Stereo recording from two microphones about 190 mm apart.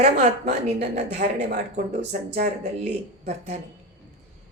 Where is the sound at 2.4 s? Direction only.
35° right (ahead or behind).